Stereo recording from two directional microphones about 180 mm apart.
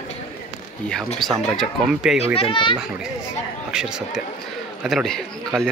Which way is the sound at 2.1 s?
35° left (ahead or behind).